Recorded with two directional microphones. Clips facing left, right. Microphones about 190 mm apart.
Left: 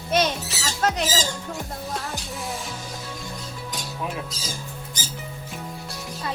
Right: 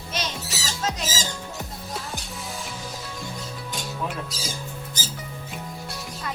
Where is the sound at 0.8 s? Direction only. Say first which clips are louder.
Left 5 dB; 65° left (ahead or behind).